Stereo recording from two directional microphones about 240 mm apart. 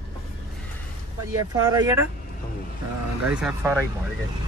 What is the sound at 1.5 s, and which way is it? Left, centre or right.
Speech, centre.